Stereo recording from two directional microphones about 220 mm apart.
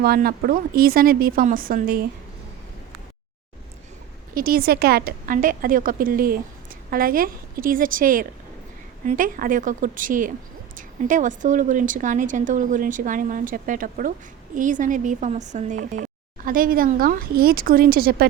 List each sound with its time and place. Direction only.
0.0 s speech: 45° right (ahead or behind)
4.4 s speech: 40° right (ahead or behind)